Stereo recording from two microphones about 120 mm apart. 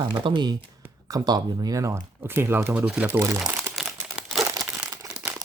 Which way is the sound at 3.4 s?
5° right (ahead or behind).